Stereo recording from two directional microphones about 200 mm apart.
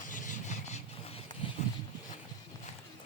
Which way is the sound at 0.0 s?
40° left (ahead or behind).